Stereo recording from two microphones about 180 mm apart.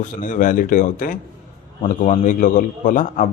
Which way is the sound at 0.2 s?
45° left (ahead or behind).